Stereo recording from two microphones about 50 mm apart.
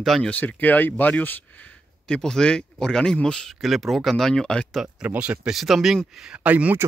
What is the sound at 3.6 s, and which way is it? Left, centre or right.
Speech, centre.